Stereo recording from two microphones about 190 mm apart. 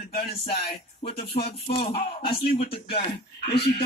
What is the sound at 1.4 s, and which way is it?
Music, 30° left (ahead or behind).